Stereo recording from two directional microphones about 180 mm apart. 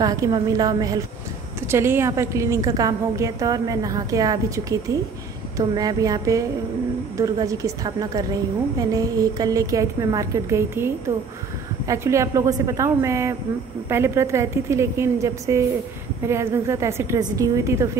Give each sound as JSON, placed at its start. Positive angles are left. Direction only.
{"t": 0.0, "sound": "a woman's voice", "side_deg": -20}
{"t": 11.9, "sound": "a woman's voice", "side_deg": -15}